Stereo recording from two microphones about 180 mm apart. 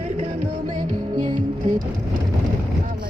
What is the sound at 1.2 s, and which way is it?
Speech, 45° right (ahead or behind).